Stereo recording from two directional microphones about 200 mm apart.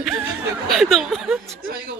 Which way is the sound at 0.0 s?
Centre (ahead or behind).